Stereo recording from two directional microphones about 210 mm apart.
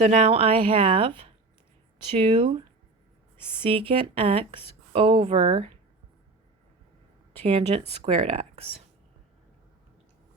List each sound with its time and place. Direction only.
0.0 s speech: 30° right (ahead or behind)
3.6 s speech: 25° right (ahead or behind)
7.4 s speech: 30° right (ahead or behind)